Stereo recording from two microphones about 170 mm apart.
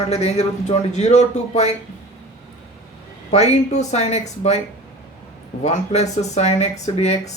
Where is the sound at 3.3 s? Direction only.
40° left (ahead or behind).